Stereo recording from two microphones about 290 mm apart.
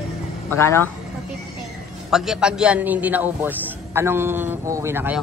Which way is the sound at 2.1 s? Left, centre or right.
Centre.